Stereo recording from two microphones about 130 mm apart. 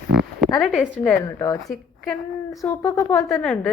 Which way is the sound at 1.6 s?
Centre (ahead or behind).